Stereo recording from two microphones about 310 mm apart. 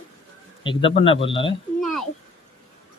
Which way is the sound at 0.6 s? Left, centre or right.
Centre.